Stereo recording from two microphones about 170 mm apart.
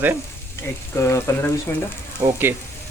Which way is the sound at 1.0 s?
15° left (ahead or behind).